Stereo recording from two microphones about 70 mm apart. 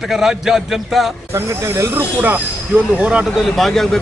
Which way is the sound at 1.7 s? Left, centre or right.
Right.